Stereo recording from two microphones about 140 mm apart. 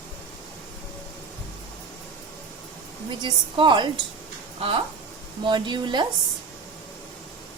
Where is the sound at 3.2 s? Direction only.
35° right (ahead or behind).